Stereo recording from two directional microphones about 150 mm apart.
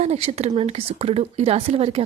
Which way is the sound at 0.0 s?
45° right (ahead or behind).